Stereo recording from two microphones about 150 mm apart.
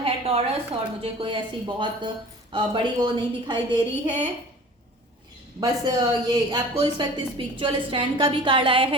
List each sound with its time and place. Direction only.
0.0 s a woman's voice: 40° right (ahead or behind)
5.5 s a woman's voice: 30° right (ahead or behind)